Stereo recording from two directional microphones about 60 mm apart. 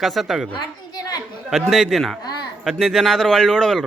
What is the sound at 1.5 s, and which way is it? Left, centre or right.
Speech, centre.